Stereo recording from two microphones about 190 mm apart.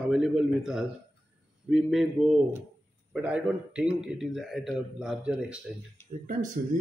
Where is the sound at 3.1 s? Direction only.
5° right (ahead or behind).